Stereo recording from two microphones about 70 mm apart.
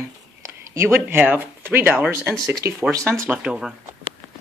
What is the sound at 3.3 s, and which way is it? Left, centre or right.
Speech, centre.